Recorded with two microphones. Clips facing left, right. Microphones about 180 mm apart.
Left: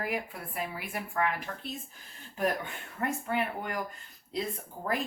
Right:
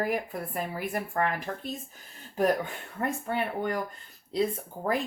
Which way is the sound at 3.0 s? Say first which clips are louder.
Right 1 dB; 35° right (ahead or behind).